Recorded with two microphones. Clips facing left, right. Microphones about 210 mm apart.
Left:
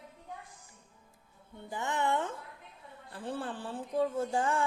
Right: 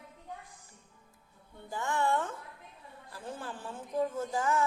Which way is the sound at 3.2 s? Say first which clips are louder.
Left 4 dB; 30° left (ahead or behind).